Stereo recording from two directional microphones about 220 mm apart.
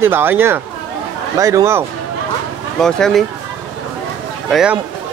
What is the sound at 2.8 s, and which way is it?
Speech, centre (ahead or behind).